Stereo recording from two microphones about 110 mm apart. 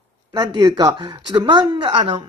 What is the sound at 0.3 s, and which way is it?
Speech, 40° right (ahead or behind).